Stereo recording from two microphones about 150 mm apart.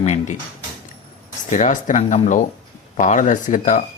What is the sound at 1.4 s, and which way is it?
Speech, 55° left (ahead or behind).